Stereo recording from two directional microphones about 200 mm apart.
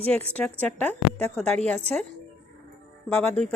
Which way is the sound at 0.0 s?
10° left (ahead or behind).